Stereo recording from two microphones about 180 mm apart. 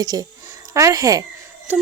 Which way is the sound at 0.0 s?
20° right (ahead or behind).